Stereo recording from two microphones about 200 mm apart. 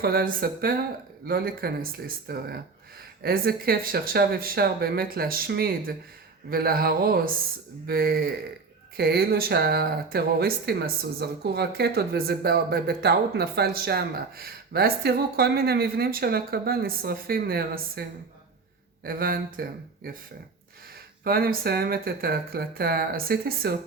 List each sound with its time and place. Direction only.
0.0 s speech: 45° right (ahead or behind)
19.0 s speech: 45° right (ahead or behind)
21.2 s speech: 45° right (ahead or behind)